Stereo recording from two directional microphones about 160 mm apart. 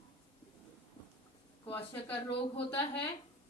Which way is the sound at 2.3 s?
35° left (ahead or behind).